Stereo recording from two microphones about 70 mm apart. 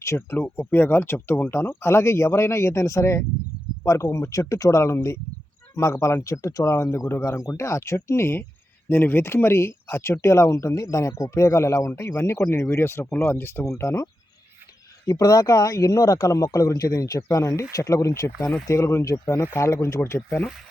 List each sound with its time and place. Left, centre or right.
0.2 s speech: left
13.7 s speech: left
15.1 s speech: left